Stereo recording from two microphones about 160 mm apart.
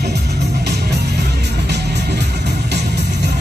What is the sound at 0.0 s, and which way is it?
Music, 90° right.